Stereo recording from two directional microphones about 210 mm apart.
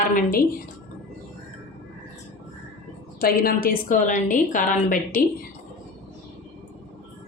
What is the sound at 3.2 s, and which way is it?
A woman's voice, 45° left (ahead or behind).